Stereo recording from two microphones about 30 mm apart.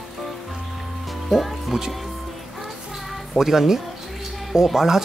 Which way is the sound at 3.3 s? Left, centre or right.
Centre.